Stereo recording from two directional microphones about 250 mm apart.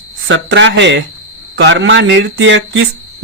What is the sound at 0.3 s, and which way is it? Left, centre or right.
A man's voice, right.